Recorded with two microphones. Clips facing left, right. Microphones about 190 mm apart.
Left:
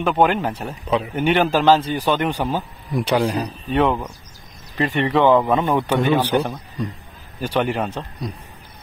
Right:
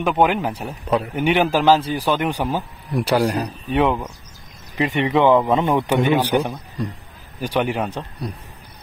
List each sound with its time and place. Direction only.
0.0 s a man's voice: 10° right (ahead or behind)